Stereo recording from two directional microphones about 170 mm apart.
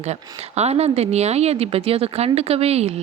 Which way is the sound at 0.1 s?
40° right (ahead or behind).